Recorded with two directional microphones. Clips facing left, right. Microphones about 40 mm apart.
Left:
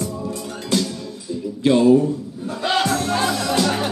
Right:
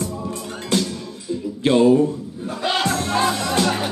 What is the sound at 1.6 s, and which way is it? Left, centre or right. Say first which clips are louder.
Speech: left 1 dB; right.